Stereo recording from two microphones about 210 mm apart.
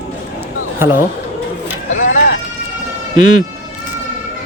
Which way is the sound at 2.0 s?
40° left (ahead or behind).